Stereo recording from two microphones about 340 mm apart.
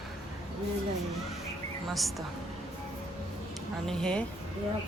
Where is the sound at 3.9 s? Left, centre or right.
Centre.